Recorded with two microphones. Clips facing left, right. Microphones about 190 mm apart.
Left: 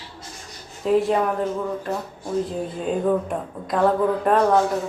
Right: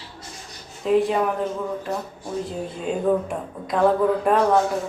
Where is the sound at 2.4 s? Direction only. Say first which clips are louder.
Left 2 dB; centre (ahead or behind).